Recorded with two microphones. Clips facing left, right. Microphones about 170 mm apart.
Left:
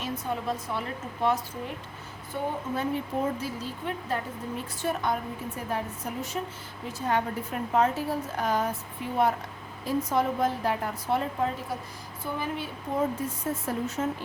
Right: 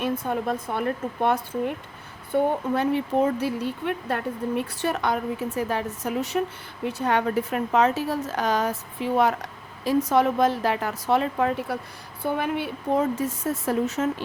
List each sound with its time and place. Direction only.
0.0 s speech: 55° right (ahead or behind)
2.3 s speech: 70° right (ahead or behind)
6.8 s a woman's voice: 70° right (ahead or behind); by 9.3 s 90° right
9.8 s speech: 80° right